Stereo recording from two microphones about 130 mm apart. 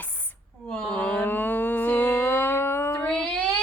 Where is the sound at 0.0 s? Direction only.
10° left (ahead or behind).